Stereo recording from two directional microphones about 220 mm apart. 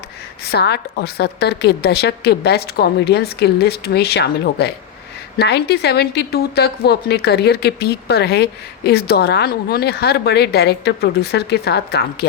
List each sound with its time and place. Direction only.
0.4 s a woman's voice: 50° left (ahead or behind)